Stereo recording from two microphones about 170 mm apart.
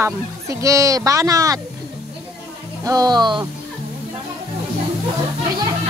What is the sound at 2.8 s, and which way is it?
Speech, 20° right (ahead or behind).